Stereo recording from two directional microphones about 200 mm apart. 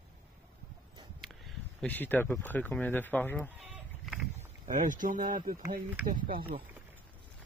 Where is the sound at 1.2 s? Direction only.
Centre (ahead or behind).